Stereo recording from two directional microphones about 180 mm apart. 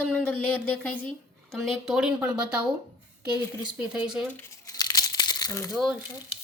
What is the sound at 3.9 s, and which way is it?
Speech, 5° right (ahead or behind).